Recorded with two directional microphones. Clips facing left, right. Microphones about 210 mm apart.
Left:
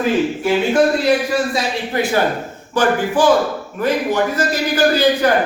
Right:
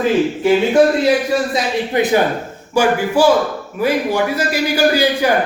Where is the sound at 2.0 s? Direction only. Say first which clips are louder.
Right 2 dB; 20° right (ahead or behind).